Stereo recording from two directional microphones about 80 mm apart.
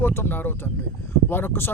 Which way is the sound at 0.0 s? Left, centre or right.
Left.